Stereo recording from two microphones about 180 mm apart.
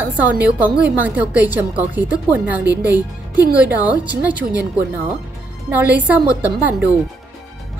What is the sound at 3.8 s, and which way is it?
Speech, 10° right (ahead or behind).